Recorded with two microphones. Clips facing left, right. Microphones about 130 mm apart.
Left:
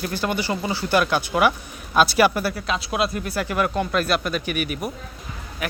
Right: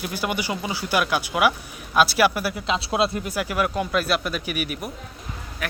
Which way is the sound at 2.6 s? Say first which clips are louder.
Right 5 dB; 25° right (ahead or behind).